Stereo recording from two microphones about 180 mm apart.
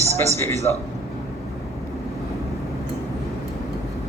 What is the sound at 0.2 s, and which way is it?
Speech, 15° left (ahead or behind).